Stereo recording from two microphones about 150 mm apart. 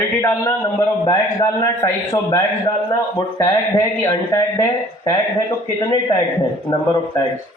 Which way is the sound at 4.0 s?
25° left (ahead or behind).